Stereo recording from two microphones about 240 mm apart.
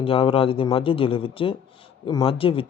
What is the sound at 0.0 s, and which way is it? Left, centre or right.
Speech, left.